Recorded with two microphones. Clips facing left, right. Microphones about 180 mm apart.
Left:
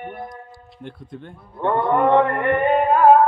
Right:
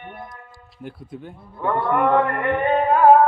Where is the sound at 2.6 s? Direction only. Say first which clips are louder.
Even; 5° left (ahead or behind).